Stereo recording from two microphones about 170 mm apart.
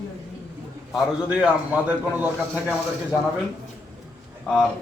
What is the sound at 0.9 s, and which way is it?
Speech, 5° right (ahead or behind).